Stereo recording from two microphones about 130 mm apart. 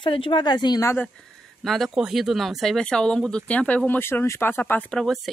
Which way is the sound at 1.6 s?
Centre (ahead or behind).